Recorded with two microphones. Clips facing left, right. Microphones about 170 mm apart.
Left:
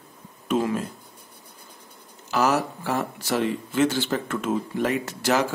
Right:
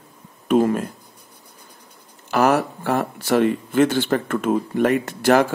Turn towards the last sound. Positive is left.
turn(degrees=-55)  # may be behind; listen again after turning